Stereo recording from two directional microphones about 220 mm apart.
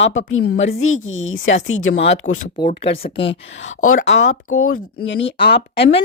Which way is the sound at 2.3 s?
35° left (ahead or behind).